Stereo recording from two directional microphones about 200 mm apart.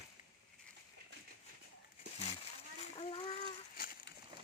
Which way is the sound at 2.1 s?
30° left (ahead or behind).